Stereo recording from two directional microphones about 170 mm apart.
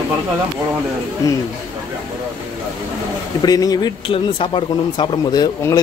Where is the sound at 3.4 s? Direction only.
20° left (ahead or behind).